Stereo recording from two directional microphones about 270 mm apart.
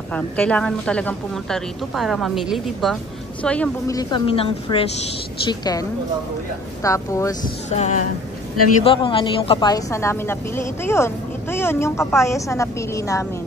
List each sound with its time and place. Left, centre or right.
0.1 s a woman's voice: centre
7.7 s a sound: left
8.8 s a woman's voice: centre